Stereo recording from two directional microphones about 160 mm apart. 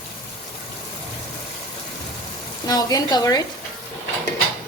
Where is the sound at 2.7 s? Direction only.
25° left (ahead or behind).